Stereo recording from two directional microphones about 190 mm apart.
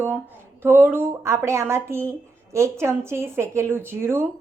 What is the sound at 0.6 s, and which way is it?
Speech, 10° right (ahead or behind).